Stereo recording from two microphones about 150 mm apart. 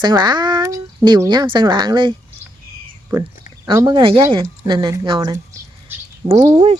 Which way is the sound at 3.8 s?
30° right (ahead or behind).